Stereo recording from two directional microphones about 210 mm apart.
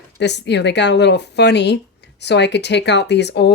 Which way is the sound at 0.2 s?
55° left (ahead or behind).